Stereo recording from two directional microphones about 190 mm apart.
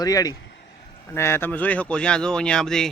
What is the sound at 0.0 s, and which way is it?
Speech, 20° left (ahead or behind).